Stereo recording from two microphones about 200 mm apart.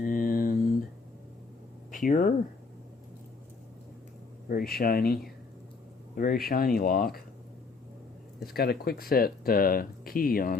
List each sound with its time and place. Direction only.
0.0 s a sound: 45° left (ahead or behind)
1.9 s speech: 40° left (ahead or behind)
4.4 s speech: 50° left (ahead or behind)
8.4 s speech: 50° left (ahead or behind)